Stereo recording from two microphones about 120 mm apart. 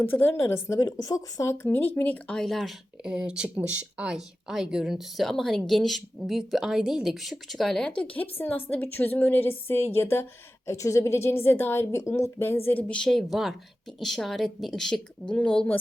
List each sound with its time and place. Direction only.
0.0 s a woman's voice: 15° left (ahead or behind)